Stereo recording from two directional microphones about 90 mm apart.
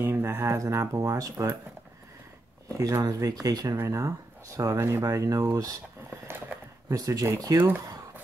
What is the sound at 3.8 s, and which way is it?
Speech, 35° right (ahead or behind).